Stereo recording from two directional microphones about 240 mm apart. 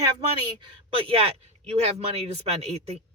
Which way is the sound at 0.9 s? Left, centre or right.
Right.